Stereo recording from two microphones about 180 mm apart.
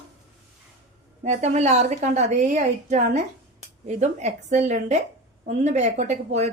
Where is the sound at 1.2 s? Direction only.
40° right (ahead or behind).